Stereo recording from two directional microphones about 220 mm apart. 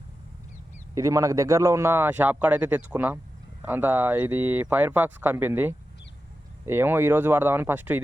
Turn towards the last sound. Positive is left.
turn(degrees=-10)  # may be behind; listen again after turning